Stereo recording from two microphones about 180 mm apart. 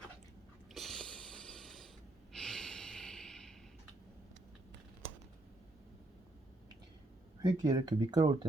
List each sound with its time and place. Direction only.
0.7 s a sound: centre (ahead or behind)
2.3 s snort: 5° left (ahead or behind)
7.4 s speech: 20° right (ahead or behind)